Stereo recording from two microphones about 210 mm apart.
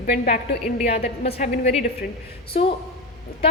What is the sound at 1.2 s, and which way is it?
Speech, 30° left (ahead or behind).